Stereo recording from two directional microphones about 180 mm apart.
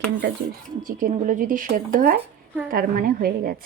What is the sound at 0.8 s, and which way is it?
Speech, 45° right (ahead or behind).